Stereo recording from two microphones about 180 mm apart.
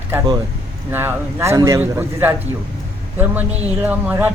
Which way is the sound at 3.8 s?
10° right (ahead or behind).